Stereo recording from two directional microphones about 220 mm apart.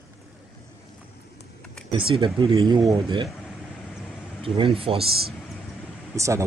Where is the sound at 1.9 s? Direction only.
25° right (ahead or behind).